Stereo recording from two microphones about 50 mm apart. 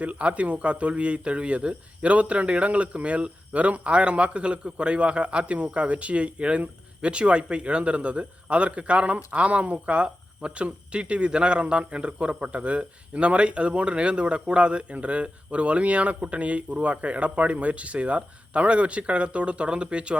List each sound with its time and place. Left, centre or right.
0.0 s a man's voice: right